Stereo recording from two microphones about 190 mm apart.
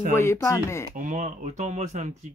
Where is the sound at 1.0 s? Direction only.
40° right (ahead or behind).